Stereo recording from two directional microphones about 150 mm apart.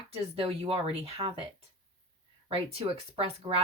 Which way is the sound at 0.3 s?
40° right (ahead or behind).